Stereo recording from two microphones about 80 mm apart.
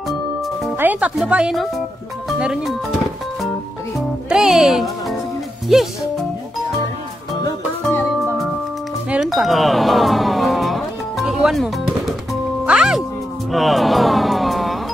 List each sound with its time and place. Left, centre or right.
0.7 s music: right
1.2 s speech: centre
4.3 s speech: centre
9.2 s music: centre